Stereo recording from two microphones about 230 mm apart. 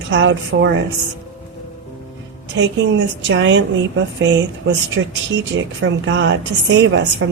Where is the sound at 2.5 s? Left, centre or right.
Right.